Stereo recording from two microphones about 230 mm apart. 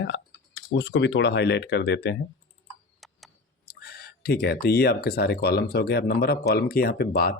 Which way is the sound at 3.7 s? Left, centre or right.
Left.